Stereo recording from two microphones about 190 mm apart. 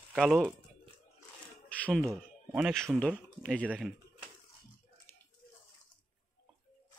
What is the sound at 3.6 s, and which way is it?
Speech, 10° right (ahead or behind).